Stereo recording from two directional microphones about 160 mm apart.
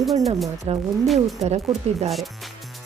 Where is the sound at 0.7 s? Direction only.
40° right (ahead or behind).